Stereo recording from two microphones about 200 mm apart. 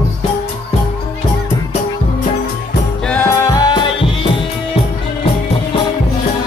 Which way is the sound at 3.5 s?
20° left (ahead or behind).